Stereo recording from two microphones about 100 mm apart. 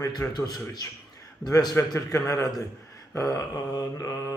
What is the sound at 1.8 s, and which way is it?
A man's voice, 30° left (ahead or behind).